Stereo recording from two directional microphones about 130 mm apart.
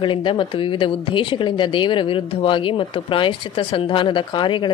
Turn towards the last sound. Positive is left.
turn(degrees=40)  # may be behind; listen again after turning